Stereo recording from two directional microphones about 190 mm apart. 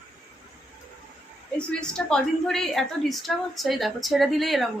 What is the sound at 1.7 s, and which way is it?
A woman's voice, 5° left (ahead or behind).